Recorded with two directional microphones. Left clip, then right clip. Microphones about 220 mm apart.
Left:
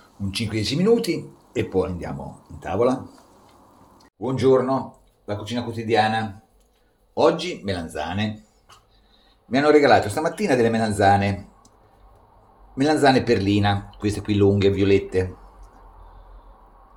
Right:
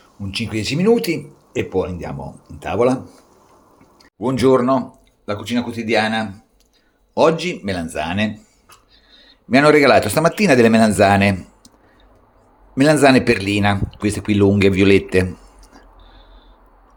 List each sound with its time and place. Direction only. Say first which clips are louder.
0.3 s speech: right 3 dB; 10° right (ahead or behind)
4.2 s speech: right 4 dB; 35° right (ahead or behind)
9.5 s speech: right 4 dB; 35° right (ahead or behind)
12.7 s speech: right 5 dB; 35° right (ahead or behind)